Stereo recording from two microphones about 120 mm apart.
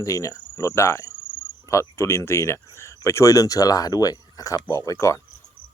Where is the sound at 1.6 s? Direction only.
25° left (ahead or behind).